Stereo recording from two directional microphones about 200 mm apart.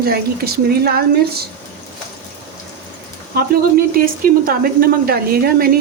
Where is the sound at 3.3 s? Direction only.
45° right (ahead or behind).